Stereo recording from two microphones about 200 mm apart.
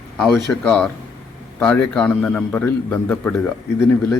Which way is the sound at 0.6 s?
5° left (ahead or behind).